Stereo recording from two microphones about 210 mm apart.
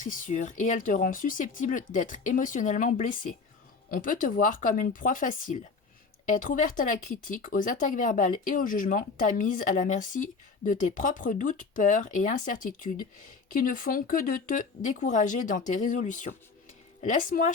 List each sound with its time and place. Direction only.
0.0 s speech: 40° left (ahead or behind)